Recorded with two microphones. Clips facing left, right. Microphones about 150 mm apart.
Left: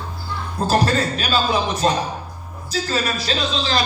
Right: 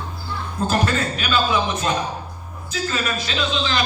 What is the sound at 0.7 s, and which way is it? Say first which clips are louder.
A man's voice: left 4 dB; 35° left (ahead or behind).